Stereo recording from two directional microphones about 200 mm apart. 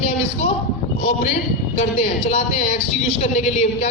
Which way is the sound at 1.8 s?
35° left (ahead or behind).